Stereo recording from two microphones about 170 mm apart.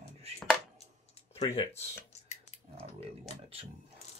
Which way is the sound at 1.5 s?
35° left (ahead or behind).